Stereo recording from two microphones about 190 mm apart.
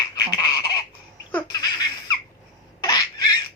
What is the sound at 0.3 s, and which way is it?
Goose, 20° left (ahead or behind).